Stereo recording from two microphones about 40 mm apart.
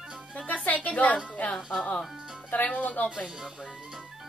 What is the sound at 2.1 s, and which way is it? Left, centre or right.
Music, centre.